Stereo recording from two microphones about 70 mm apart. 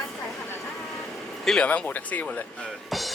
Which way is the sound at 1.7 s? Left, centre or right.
Left.